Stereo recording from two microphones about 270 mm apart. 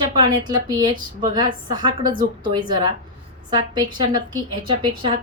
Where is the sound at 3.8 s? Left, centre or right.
Centre.